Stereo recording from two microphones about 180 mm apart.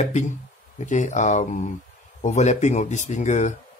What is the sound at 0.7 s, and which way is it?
Speech, 40° left (ahead or behind).